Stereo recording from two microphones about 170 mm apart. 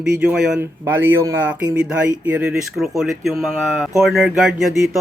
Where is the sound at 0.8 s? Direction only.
15° right (ahead or behind).